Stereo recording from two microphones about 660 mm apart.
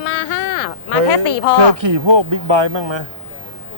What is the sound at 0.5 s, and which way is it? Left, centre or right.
Speech, left.